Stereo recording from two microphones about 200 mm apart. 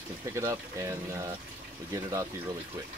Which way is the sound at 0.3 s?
15° right (ahead or behind).